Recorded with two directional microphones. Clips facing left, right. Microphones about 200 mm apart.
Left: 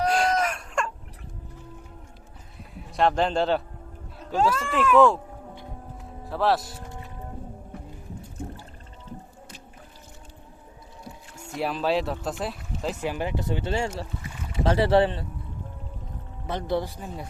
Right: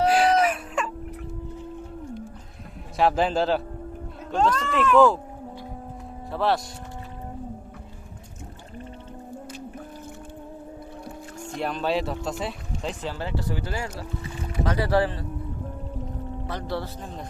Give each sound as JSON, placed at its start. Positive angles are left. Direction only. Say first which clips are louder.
{"t": 0.0, "sound": "a sound", "louder": "right 4 dB", "side_deg": -5}
{"t": 3.0, "sound": "speech", "louder": "right 1 dB", "side_deg": -5}
{"t": 6.3, "sound": "speech", "louder": "left 1 dB", "side_deg": 0}
{"t": 11.5, "sound": "speech", "louder": "left 1 dB", "side_deg": 0}
{"t": 16.5, "sound": "a man's voice", "louder": "left 5 dB", "side_deg": 20}